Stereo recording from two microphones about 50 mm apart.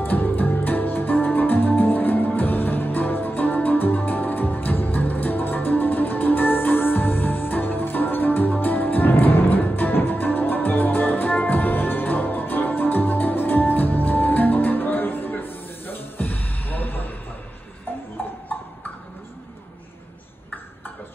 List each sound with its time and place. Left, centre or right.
0.0 s music: left